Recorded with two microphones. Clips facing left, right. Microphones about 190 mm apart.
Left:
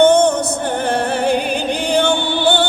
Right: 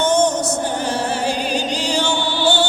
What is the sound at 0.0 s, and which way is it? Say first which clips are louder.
Music: left 6 dB; 60° left (ahead or behind).